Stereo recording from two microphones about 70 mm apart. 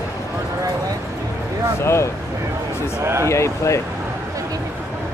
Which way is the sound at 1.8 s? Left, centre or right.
Left.